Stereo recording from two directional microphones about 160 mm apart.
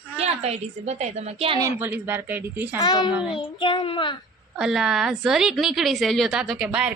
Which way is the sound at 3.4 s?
30° left (ahead or behind).